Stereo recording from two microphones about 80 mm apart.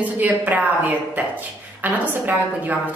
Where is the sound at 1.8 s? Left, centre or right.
Right.